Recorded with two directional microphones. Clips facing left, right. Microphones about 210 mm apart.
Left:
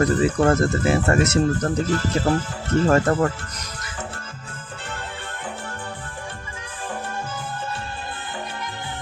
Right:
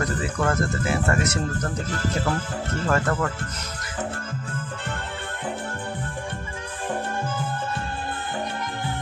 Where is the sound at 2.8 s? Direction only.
25° left (ahead or behind).